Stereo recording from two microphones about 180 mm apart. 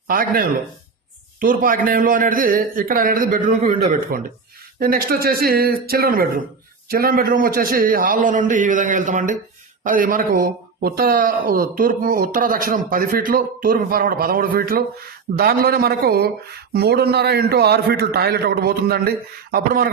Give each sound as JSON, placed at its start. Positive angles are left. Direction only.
{"t": 0.1, "sound": "a man's voice", "side_deg": -55}